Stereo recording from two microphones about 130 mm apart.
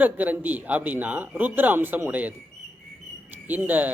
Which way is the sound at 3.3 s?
15° right (ahead or behind).